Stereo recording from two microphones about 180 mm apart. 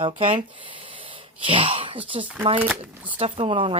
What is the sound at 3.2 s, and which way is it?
Speech, 30° right (ahead or behind).